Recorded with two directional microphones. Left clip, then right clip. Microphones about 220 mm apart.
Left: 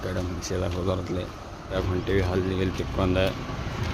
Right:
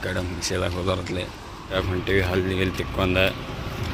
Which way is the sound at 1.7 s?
Centre (ahead or behind).